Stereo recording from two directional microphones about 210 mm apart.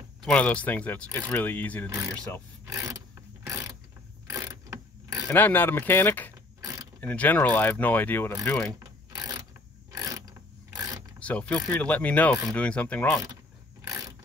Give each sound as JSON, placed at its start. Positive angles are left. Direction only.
{"t": 0.2, "sound": "speech", "side_deg": 5}
{"t": 1.9, "sound": "speech", "side_deg": -15}
{"t": 2.6, "sound": "a sound", "side_deg": -15}
{"t": 3.4, "sound": "pulleys", "side_deg": -15}
{"t": 4.3, "sound": "mechanisms", "side_deg": -15}
{"t": 5.3, "sound": "speech", "side_deg": 10}
{"t": 6.6, "sound": "mechanisms", "side_deg": -15}
{"t": 7.0, "sound": "speech", "side_deg": 10}
{"t": 8.7, "sound": "a sound", "side_deg": -15}
{"t": 9.8, "sound": "mechanisms", "side_deg": -15}
{"t": 10.7, "sound": "a sound", "side_deg": -15}
{"t": 11.1, "sound": "speech", "side_deg": 5}